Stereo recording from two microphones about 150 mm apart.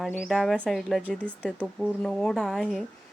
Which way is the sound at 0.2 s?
Centre (ahead or behind).